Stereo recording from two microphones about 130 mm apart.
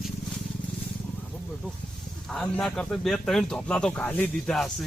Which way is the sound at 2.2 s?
5° left (ahead or behind).